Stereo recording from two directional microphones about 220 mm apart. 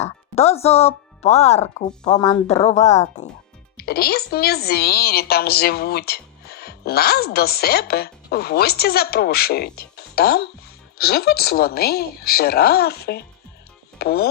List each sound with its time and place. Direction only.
0.0 s speech: 30° left (ahead or behind)
3.8 s a woman's voice: 45° left (ahead or behind)